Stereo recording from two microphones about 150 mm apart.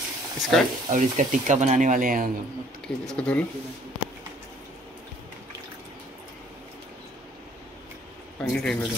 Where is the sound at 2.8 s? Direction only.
5° left (ahead or behind).